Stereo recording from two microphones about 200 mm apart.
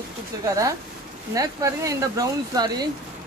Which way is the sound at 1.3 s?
15° right (ahead or behind).